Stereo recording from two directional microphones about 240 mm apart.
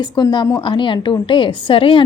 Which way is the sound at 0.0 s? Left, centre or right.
Centre.